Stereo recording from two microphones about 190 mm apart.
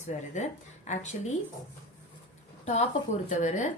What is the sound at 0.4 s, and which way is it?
Speech, 40° left (ahead or behind).